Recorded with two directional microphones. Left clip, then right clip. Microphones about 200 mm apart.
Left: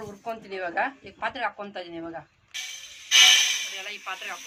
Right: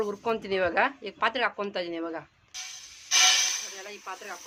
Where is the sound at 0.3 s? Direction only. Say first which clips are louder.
Right 4 dB; 60° right (ahead or behind).